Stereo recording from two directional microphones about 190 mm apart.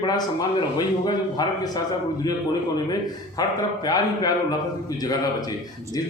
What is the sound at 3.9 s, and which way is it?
Speech, 20° left (ahead or behind).